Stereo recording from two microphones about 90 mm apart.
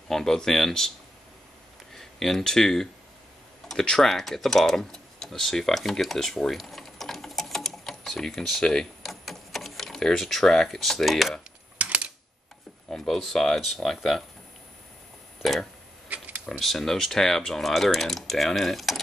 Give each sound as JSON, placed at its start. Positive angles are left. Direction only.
{"t": 0.1, "sound": "speech", "side_deg": 5}
{"t": 2.0, "sound": "speech", "side_deg": 0}
{"t": 11.8, "sound": "typewriter", "side_deg": -15}
{"t": 12.9, "sound": "speech", "side_deg": 5}
{"t": 15.4, "sound": "speech", "side_deg": 0}
{"t": 16.1, "sound": "camera", "side_deg": -15}
{"t": 16.4, "sound": "speech", "side_deg": 0}